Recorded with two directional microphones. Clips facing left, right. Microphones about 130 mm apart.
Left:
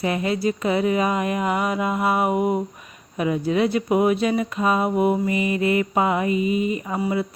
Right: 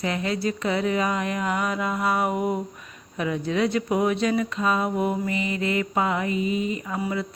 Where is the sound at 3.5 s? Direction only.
20° left (ahead or behind).